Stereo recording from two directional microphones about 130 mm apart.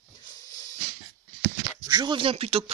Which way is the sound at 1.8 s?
35° right (ahead or behind).